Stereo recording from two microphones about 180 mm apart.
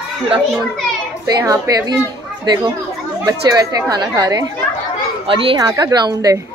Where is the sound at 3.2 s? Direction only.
20° right (ahead or behind).